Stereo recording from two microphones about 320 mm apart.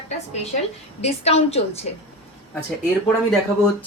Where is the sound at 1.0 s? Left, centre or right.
Centre.